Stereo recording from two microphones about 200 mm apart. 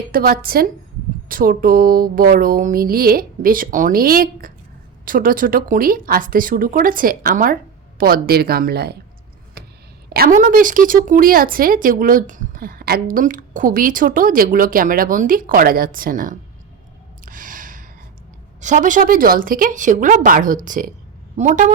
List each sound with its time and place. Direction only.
0.1 s speech: 45° right (ahead or behind)
9.6 s a sound: 50° right (ahead or behind)
10.1 s speech: 45° right (ahead or behind)
17.2 s gasp: 45° right (ahead or behind)
18.6 s a woman's voice: 40° right (ahead or behind)